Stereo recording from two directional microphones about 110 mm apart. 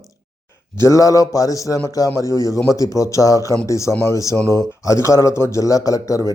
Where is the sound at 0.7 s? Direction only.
30° left (ahead or behind).